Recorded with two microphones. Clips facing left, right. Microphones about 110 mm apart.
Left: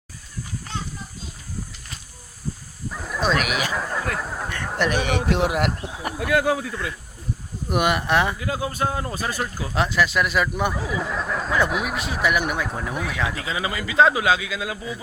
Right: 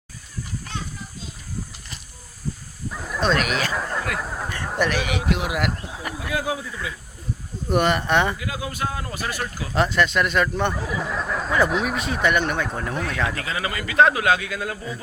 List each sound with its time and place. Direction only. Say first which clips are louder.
2.9 s a sound: right 1 dB; centre (ahead or behind)
5.3 s speech: left 3 dB; 30° left (ahead or behind)
5.7 s speech: left 1 dB; 5° left (ahead or behind)
6.1 s speech: left 6 dB; 60° left (ahead or behind)
7.7 s speech: right 1 dB; 5° left (ahead or behind)
8.4 s speech: left 3 dB; 30° left (ahead or behind)
9.7 s speech: right 1 dB; centre (ahead or behind)
13.4 s a man's voice: left 1 dB; 15° left (ahead or behind)